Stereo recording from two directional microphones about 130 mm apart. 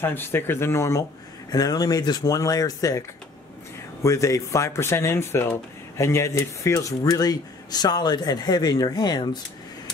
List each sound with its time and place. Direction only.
0.0 s speech: 15° left (ahead or behind)
4.0 s speech: 25° left (ahead or behind)